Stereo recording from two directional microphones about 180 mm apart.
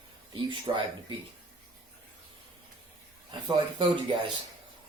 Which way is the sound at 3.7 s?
25° right (ahead or behind).